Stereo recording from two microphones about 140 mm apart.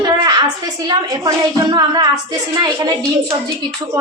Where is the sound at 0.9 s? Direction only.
30° right (ahead or behind).